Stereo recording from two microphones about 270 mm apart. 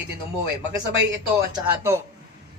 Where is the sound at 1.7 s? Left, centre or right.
Centre.